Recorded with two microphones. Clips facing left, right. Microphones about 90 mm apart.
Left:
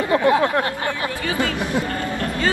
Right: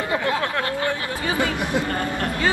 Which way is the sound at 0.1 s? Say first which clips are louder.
Left 8 dB; 25° left (ahead or behind).